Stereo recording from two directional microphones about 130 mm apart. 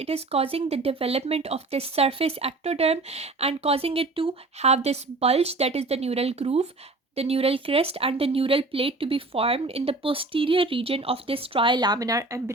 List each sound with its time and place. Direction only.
0.0 s speech: 50° right (ahead or behind); by 12.4 s 25° right (ahead or behind)